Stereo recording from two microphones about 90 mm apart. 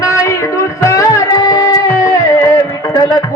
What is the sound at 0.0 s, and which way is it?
Music, 35° left (ahead or behind).